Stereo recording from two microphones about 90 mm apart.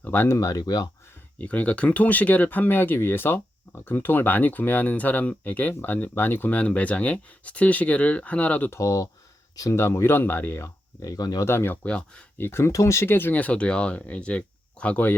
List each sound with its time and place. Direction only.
0.0 s speech: 20° left (ahead or behind)
0.3 s speech: 40° left (ahead or behind)
1.4 s speech: 15° left (ahead or behind)
8.7 s speech: 35° left (ahead or behind)
9.8 s speech: 25° left (ahead or behind)
11.0 s speech: 45° left (ahead or behind)
11.4 s speech: 25° left (ahead or behind)
11.9 s speech: 10° left (ahead or behind)
12.4 s speech: 30° left (ahead or behind)